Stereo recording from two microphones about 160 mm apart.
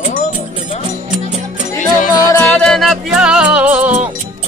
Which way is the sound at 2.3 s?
5° left (ahead or behind).